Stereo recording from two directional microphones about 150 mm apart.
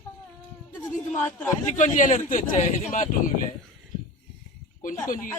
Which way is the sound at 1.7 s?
55° left (ahead or behind).